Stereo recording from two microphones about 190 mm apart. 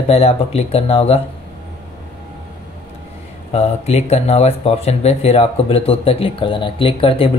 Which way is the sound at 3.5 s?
35° left (ahead or behind).